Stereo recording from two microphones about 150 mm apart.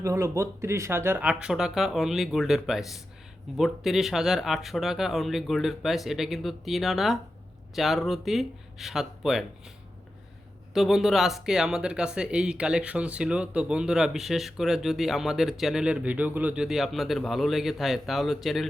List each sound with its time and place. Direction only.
0.0 s speech: 20° right (ahead or behind); by 9.4 s centre (ahead or behind)
10.8 s speech: centre (ahead or behind)